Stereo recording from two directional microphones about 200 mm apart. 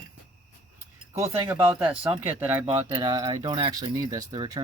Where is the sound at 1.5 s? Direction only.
10° right (ahead or behind).